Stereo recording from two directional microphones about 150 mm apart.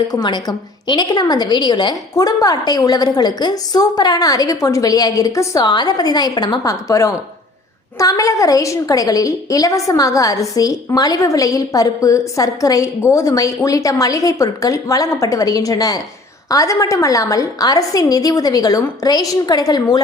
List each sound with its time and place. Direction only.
0.1 s a woman's voice: 25° left (ahead or behind)